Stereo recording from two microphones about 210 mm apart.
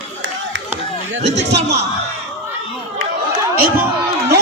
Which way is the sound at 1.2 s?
55° right (ahead or behind).